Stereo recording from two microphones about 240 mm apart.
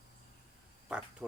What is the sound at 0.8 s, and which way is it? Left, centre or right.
Speech, centre.